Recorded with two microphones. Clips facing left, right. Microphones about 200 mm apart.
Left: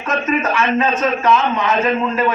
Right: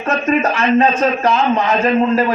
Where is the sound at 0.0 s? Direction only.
40° right (ahead or behind).